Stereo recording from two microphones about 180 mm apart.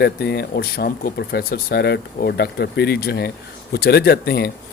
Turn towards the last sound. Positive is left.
turn(degrees=60)  # may be behind; listen again after turning